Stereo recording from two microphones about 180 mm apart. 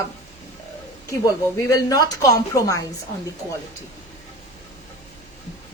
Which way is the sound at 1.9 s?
20° left (ahead or behind).